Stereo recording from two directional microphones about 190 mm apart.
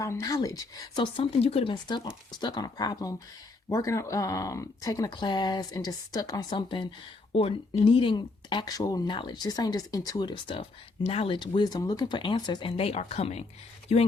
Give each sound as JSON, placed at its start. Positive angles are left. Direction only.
{"t": 0.0, "sound": "speech", "side_deg": 15}